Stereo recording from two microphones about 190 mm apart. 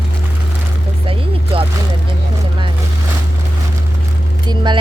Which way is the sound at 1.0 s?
30° right (ahead or behind).